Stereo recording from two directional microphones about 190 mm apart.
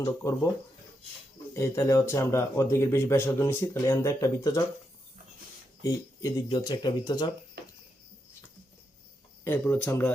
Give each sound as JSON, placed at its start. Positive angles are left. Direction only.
{"t": 0.0, "sound": "speech", "side_deg": 15}
{"t": 1.5, "sound": "speech", "side_deg": 15}
{"t": 5.8, "sound": "speech", "side_deg": 20}
{"t": 9.4, "sound": "speech", "side_deg": 10}